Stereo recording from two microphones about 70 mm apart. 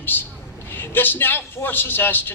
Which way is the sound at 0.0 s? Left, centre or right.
Left.